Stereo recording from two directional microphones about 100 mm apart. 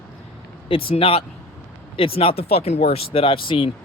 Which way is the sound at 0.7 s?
65° left (ahead or behind).